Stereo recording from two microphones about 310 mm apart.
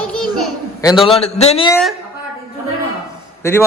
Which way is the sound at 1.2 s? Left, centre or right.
Centre.